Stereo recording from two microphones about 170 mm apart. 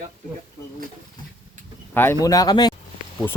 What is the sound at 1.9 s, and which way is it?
Speech, 15° left (ahead or behind).